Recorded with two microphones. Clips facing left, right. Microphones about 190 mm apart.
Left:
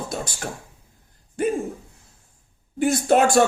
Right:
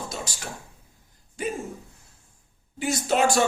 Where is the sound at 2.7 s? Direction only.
55° left (ahead or behind).